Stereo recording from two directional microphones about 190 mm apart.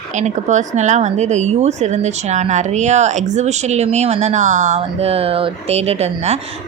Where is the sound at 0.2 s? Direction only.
40° right (ahead or behind).